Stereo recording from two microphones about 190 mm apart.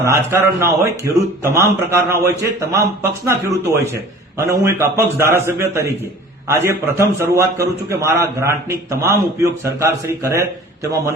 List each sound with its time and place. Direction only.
0.1 s a man's voice: 15° right (ahead or behind)